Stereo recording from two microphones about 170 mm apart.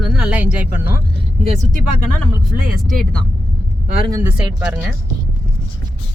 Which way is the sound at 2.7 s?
60° right (ahead or behind).